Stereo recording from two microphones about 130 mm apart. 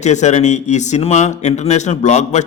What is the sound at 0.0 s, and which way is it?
Speech, 65° left (ahead or behind).